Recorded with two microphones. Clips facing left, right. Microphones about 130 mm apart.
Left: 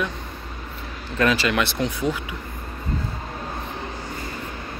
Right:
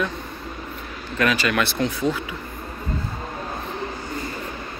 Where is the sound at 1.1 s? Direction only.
25° left (ahead or behind).